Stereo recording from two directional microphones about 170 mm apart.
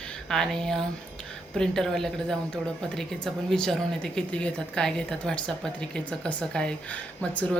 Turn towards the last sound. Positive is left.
turn(degrees=10)  # may be behind; listen again after turning